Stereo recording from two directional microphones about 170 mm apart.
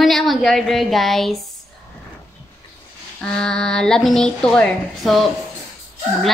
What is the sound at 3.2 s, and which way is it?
Speech, 5° left (ahead or behind).